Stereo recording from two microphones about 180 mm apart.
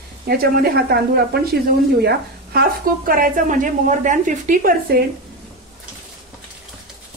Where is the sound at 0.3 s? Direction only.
55° right (ahead or behind).